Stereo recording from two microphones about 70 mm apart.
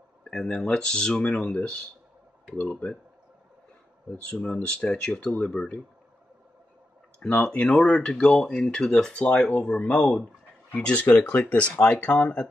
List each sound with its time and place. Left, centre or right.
0.2 s speech: centre
4.2 s speech: centre
7.4 s speech: centre